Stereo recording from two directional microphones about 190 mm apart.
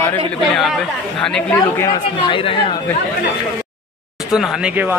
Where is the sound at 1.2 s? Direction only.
5° left (ahead or behind).